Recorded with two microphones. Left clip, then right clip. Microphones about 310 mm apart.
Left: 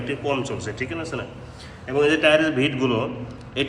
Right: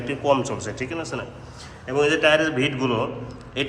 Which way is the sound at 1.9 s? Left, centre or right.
Centre.